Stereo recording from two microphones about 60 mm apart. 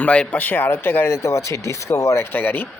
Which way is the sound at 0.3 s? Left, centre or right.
Left.